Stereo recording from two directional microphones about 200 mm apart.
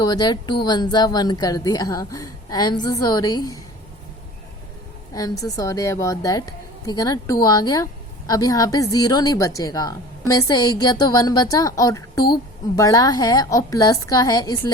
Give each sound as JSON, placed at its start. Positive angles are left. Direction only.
{"t": 0.0, "sound": "a woman's voice", "side_deg": 20}
{"t": 5.1, "sound": "a woman's voice", "side_deg": 15}